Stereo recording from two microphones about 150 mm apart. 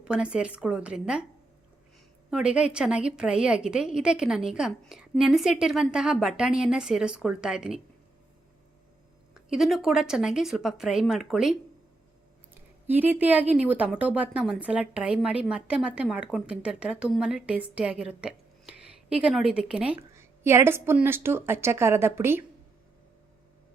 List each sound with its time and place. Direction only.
0.0 s a woman's voice: 5° right (ahead or behind)
2.3 s a woman's voice: 5° right (ahead or behind)
9.3 s a woman's voice: 5° right (ahead or behind)
12.9 s a woman's voice: 10° right (ahead or behind)
20.0 s a woman's voice: 15° right (ahead or behind)